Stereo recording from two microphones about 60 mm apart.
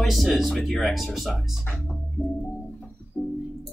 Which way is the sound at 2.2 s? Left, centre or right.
Centre.